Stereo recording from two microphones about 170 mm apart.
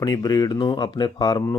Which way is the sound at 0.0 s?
20° left (ahead or behind).